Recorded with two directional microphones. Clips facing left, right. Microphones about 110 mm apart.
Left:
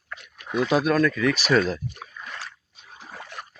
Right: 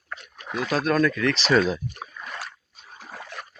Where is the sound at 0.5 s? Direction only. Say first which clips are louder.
Left 4 dB; 20° left (ahead or behind).